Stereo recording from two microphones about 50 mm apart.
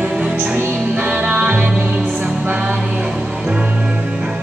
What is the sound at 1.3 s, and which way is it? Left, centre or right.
Music, right.